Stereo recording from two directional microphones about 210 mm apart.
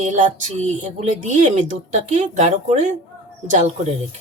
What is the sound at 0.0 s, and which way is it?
Speech, 35° right (ahead or behind).